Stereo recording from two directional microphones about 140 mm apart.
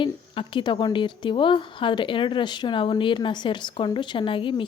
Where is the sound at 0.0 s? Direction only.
35° left (ahead or behind).